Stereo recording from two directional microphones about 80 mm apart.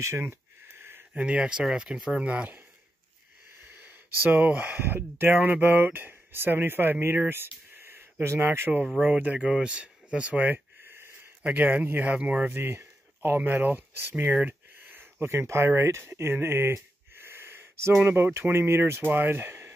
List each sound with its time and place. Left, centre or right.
0.0 s a sound: right
1.1 s speech: centre
3.7 s speech: right
9.0 s speech: centre
12.5 s speech: right